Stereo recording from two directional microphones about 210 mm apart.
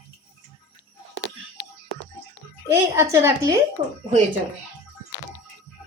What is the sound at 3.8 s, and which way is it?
Speech, 35° right (ahead or behind).